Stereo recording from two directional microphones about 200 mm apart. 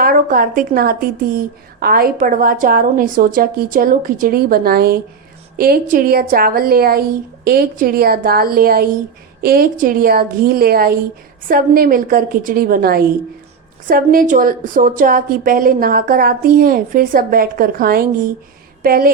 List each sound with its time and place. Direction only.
0.0 s a woman's voice: 45° right (ahead or behind)